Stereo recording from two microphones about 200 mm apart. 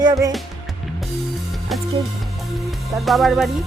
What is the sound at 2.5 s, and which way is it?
Music, centre (ahead or behind).